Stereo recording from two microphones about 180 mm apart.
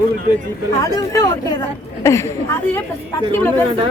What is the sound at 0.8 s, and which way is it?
A woman's voice, 20° left (ahead or behind).